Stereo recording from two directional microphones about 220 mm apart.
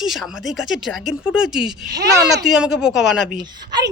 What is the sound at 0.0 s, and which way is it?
Speech, centre (ahead or behind).